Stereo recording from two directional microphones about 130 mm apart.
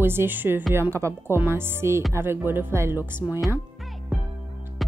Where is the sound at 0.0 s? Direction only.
15° right (ahead or behind).